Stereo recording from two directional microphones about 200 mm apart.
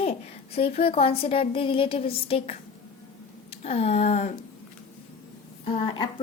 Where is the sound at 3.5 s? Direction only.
30° left (ahead or behind).